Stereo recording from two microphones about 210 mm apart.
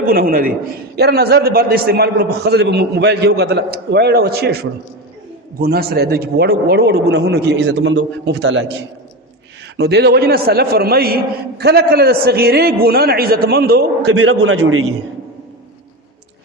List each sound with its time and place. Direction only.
0.0 s a man's voice: 45° right (ahead or behind)
5.5 s a man's voice: 45° right (ahead or behind)
14.1 s a man's voice: 80° right